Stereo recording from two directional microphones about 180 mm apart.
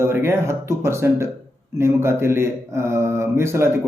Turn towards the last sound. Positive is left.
turn(degrees=-15)  # may be behind; listen again after turning